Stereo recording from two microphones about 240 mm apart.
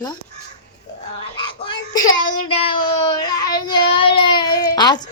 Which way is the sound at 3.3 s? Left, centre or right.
Centre.